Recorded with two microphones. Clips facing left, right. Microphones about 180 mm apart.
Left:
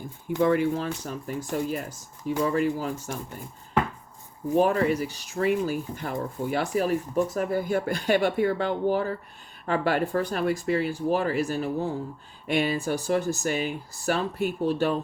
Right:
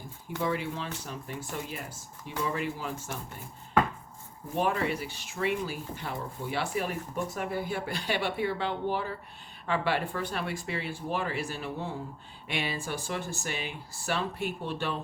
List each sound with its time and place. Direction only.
0.4 s speech: 50° left (ahead or behind)
4.5 s speech: 40° left (ahead or behind)